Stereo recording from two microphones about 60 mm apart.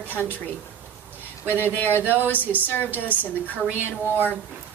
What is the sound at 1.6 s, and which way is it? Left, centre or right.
Speech, left.